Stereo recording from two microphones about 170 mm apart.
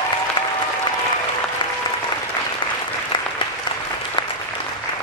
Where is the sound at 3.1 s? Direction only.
25° left (ahead or behind).